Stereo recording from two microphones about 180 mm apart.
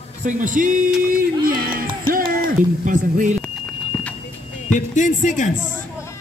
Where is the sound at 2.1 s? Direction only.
50° right (ahead or behind).